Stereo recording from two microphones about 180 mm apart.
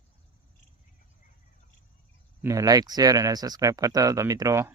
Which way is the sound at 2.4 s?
15° right (ahead or behind).